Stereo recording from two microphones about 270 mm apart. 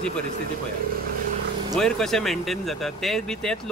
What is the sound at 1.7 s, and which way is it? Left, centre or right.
A man's voice, centre.